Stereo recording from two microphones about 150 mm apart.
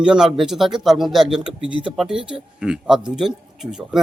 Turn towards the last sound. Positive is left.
turn(degrees=-5)  # may be behind; listen again after turning